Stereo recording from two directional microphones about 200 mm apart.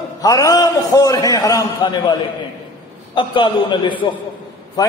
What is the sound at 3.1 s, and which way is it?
A man's voice, 25° left (ahead or behind).